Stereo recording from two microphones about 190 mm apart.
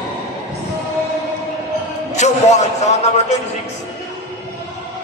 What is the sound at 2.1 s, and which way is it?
A man's voice, 35° left (ahead or behind).